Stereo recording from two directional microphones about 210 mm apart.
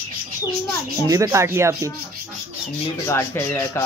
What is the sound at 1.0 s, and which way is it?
Speech, 15° right (ahead or behind).